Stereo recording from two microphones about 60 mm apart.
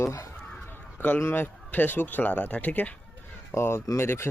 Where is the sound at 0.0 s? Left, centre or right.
Left.